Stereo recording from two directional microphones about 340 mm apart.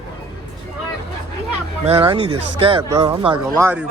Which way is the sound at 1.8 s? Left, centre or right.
Centre.